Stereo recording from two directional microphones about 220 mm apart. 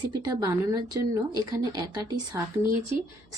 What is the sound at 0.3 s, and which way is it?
Speech, 15° right (ahead or behind).